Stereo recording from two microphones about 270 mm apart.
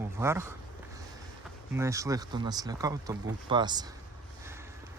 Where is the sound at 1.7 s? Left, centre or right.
Centre.